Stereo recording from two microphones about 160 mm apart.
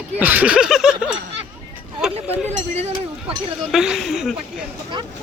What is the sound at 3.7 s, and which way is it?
Speech, 5° right (ahead or behind).